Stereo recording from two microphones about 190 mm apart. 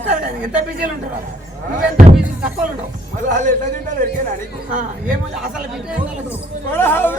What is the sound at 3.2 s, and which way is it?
Speech, 40° right (ahead or behind).